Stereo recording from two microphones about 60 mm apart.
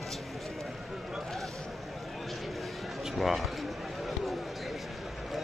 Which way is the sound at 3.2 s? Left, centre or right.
Centre.